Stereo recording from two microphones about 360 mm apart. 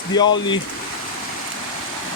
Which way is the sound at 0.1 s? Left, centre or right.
Centre.